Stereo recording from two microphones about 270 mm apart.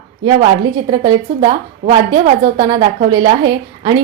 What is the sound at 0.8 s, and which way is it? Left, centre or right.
Speech, centre.